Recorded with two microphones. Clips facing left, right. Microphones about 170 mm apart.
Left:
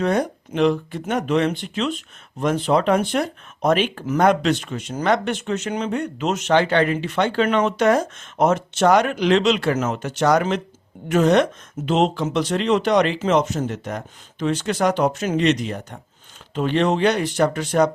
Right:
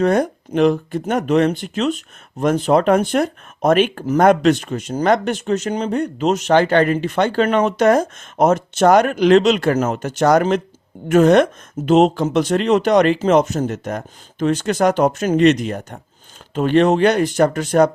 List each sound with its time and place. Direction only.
0.0 s speech: 45° right (ahead or behind)